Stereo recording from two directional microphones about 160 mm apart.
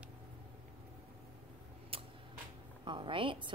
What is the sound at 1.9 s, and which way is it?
Tick-tock, 35° right (ahead or behind).